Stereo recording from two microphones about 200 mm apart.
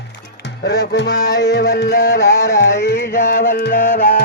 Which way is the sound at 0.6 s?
55° left (ahead or behind).